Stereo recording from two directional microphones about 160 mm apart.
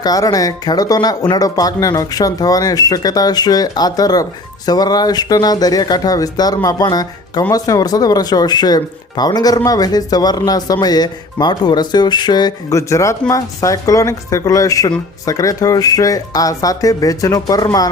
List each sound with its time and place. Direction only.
0.0 s speech: 25° left (ahead or behind)